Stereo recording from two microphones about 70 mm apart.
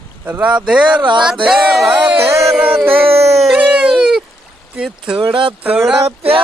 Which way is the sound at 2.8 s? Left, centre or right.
Right.